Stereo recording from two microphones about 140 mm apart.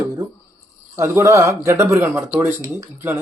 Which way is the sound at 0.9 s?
20° right (ahead or behind).